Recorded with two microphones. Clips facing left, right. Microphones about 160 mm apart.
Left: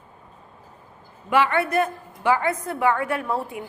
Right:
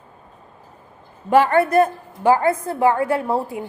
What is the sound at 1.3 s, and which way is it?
A woman's voice, 40° right (ahead or behind).